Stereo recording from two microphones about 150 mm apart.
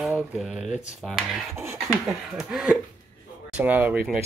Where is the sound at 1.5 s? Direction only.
20° right (ahead or behind).